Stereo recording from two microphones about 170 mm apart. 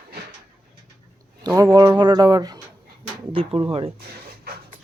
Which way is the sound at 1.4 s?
20° right (ahead or behind).